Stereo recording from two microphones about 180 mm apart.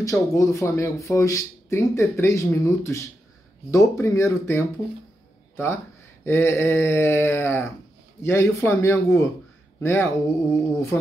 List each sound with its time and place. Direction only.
0.0 s speech: 15° left (ahead or behind)
6.2 s speech: 15° left (ahead or behind)